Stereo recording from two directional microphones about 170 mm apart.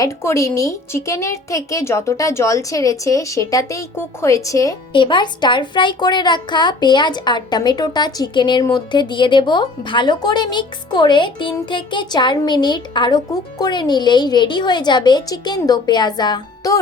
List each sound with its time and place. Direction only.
0.0 s a woman's voice: 15° left (ahead or behind)